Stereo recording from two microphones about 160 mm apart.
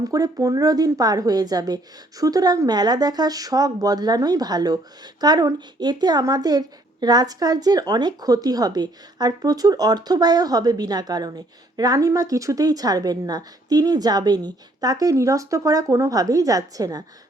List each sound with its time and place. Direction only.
0.0 s a woman's voice: 20° right (ahead or behind)